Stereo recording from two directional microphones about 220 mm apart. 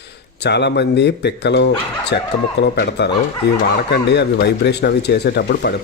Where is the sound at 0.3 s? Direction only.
50° left (ahead or behind).